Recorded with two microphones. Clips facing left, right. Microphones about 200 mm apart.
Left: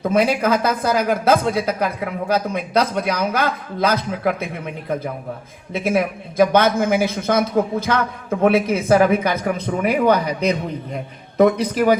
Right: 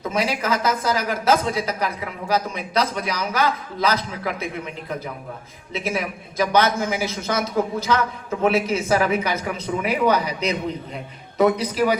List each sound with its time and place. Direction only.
0.0 s a man's voice: 55° left (ahead or behind)
5.7 s a man's voice: 55° left (ahead or behind)